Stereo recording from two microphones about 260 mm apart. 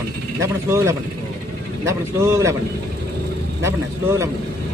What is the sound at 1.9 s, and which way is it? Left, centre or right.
Speech, centre.